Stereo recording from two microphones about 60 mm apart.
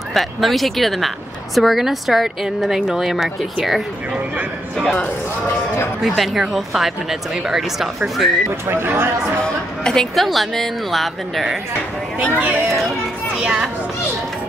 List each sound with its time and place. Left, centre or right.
0.1 s speech: centre
4.1 s speech: centre
6.0 s speech: centre
8.6 s speech: right
9.8 s speech: centre
12.4 s speech: right
13.4 s speech: centre